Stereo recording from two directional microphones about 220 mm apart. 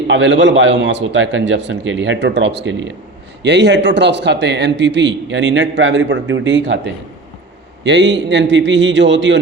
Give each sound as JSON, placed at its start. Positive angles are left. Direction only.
{"t": 0.1, "sound": "a man's voice", "side_deg": -55}